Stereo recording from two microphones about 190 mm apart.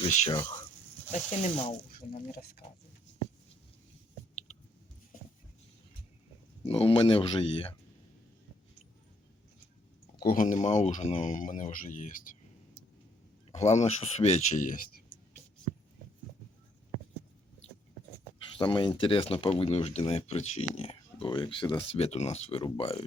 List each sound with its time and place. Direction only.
0.0 s speech: 40° left (ahead or behind)
0.3 s speech: 25° left (ahead or behind)
1.1 s speech: 35° left (ahead or behind)
1.9 s speech: 50° left (ahead or behind)
6.7 s speech: 30° left (ahead or behind)
10.2 s speech: 45° left (ahead or behind)
13.5 s speech: 35° left (ahead or behind)
18.5 s speech: 25° left (ahead or behind)